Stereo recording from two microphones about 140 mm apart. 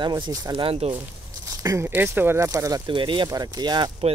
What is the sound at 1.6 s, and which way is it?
Speech, 20° right (ahead or behind).